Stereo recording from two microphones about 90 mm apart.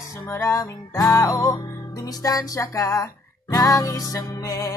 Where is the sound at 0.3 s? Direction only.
30° left (ahead or behind).